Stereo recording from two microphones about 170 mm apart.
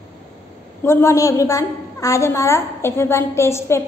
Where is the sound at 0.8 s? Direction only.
20° left (ahead or behind).